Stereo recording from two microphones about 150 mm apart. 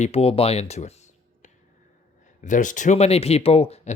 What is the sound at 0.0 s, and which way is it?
Speech, 40° left (ahead or behind).